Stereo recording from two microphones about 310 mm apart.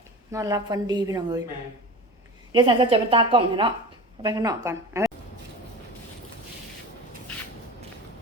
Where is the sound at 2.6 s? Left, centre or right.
Centre.